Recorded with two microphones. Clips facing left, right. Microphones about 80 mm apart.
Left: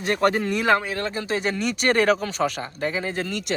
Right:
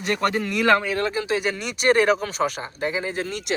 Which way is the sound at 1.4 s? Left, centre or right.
Left.